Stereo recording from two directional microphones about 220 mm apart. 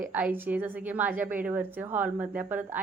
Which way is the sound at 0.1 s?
10° right (ahead or behind).